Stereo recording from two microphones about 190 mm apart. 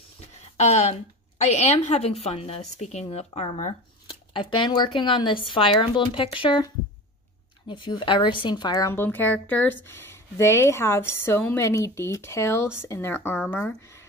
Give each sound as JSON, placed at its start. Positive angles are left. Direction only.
{"t": 0.6, "sound": "a woman's voice", "side_deg": 35}
{"t": 4.3, "sound": "speech", "side_deg": 25}